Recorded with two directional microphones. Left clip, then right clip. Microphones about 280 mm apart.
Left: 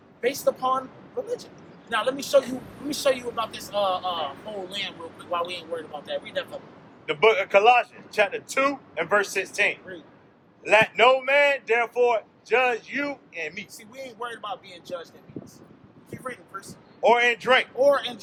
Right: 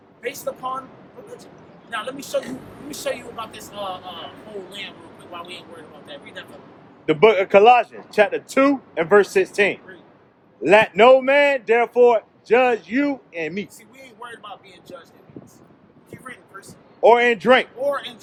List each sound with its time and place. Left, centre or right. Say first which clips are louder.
0.2 s speech: left 4 dB; centre
1.9 s a man's voice: left 4 dB; centre
7.0 s a man's voice: right 5 dB; right
14.0 s speech: left 4 dB; centre
16.0 s vehicle: left 2 dB; centre
17.0 s a man's voice: right 5 dB; right
17.7 s speech: left 3 dB; centre